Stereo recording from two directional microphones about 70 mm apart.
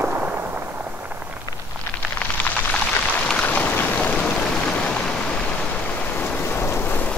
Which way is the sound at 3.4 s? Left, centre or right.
Left.